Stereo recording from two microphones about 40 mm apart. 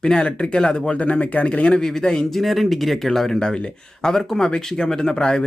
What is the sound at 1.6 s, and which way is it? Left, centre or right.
Speech, centre.